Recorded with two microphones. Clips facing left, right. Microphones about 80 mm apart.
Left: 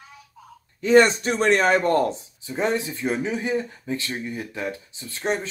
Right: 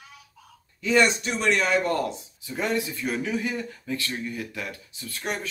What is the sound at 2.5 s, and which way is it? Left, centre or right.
Speech, left.